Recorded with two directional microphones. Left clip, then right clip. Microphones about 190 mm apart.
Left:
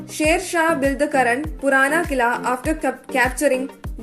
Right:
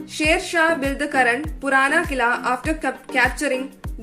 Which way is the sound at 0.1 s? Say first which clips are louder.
Left 1 dB; 25° left (ahead or behind).